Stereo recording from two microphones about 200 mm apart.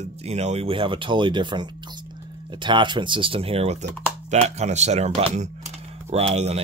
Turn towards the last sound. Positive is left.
turn(degrees=-30)  # may be behind; listen again after turning